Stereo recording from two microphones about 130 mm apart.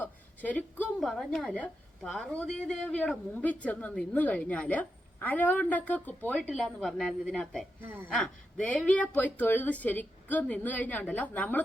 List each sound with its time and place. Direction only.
0.0 s a woman's voice: 10° left (ahead or behind)
6.5 s a woman's voice: centre (ahead or behind)
7.8 s speech: 15° right (ahead or behind)
8.1 s speech: 10° left (ahead or behind)